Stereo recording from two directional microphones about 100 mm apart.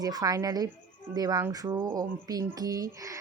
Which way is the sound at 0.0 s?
40° right (ahead or behind).